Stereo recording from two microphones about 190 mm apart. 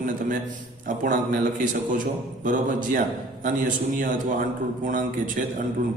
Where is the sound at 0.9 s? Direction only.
45° right (ahead or behind).